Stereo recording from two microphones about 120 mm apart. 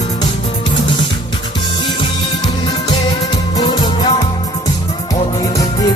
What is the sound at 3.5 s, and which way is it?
Music, 35° left (ahead or behind).